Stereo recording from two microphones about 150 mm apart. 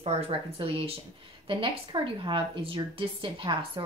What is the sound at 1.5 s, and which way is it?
A woman's voice, 35° right (ahead or behind).